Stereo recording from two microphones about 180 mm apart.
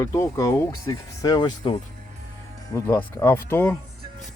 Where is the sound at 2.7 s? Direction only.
10° left (ahead or behind).